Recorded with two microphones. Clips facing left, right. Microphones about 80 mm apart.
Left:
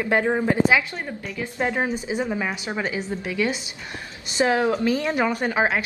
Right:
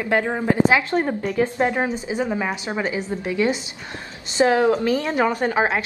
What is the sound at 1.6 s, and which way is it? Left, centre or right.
Speech, right.